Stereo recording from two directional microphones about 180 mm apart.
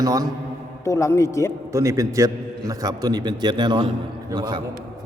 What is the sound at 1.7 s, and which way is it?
A man's voice, 15° right (ahead or behind).